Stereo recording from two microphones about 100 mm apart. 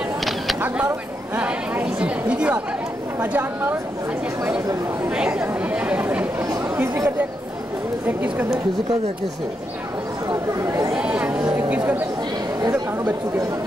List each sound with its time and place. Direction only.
0.6 s speech: 15° right (ahead or behind)
5.1 s speech: 10° right (ahead or behind)
6.4 s speech: 25° right (ahead or behind)
8.1 s a woman's voice: 20° right (ahead or behind)
10.6 s a woman's voice: 30° right (ahead or behind)
11.0 s speech: 10° right (ahead or behind)